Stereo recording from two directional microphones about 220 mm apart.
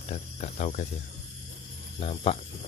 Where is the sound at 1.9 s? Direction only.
25° left (ahead or behind).